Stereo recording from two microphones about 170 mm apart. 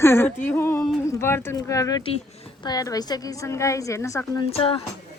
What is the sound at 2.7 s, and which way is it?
A woman's voice, 20° left (ahead or behind).